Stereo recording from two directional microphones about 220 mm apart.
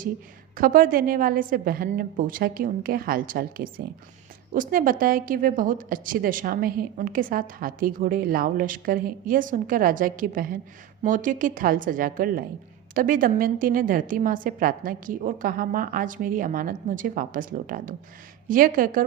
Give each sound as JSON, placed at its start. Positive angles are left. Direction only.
{"t": 0.5, "sound": "a woman's voice", "side_deg": -40}